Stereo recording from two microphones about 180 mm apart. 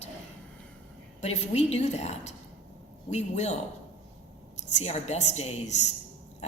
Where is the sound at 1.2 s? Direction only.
40° left (ahead or behind).